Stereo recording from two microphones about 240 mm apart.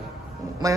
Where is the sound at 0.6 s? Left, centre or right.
Centre.